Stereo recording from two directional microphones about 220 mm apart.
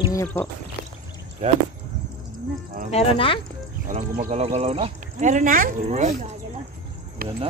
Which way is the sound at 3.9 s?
30° right (ahead or behind).